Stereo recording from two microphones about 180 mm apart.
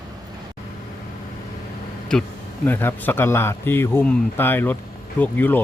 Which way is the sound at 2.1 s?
5° left (ahead or behind).